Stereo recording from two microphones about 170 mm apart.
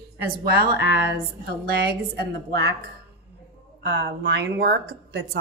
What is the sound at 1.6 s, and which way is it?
A woman's voice, 70° right (ahead or behind).